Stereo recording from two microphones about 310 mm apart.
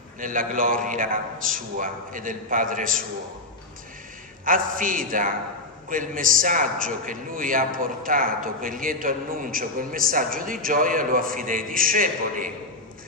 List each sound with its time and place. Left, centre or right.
0.2 s a man's voice: right
4.5 s a man's voice: right